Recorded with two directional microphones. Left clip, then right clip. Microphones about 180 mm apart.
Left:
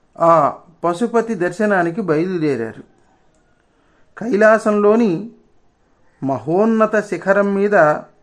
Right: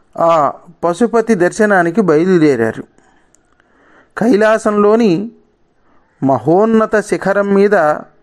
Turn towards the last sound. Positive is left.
turn(degrees=-35)  # may be behind; listen again after turning